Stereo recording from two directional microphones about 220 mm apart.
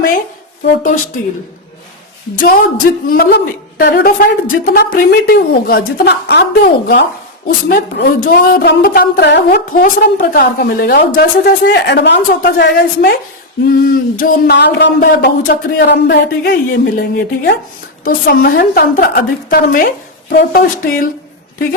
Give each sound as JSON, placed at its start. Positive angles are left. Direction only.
{"t": 0.6, "sound": "speech", "side_deg": 40}
{"t": 2.4, "sound": "a woman's voice", "side_deg": 40}